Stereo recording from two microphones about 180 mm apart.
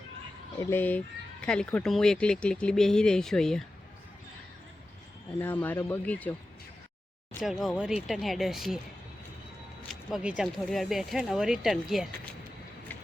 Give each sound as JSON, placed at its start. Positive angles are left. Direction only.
{"t": 0.6, "sound": "speech", "side_deg": 10}
{"t": 5.4, "sound": "speech", "side_deg": 10}
{"t": 7.8, "sound": "speech", "side_deg": -5}
{"t": 9.9, "sound": "speech", "side_deg": -5}